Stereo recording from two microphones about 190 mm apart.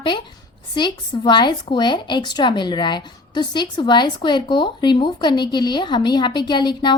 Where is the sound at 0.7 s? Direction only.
20° left (ahead or behind).